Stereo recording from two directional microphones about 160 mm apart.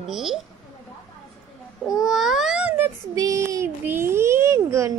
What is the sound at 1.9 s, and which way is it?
A child's voice, centre (ahead or behind).